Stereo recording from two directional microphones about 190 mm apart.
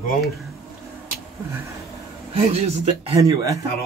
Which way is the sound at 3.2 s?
15° right (ahead or behind).